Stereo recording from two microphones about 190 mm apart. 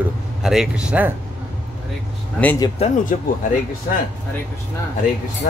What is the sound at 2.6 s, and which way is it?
Speech, 30° left (ahead or behind).